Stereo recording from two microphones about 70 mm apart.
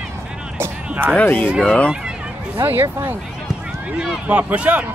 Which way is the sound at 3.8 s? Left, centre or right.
Centre.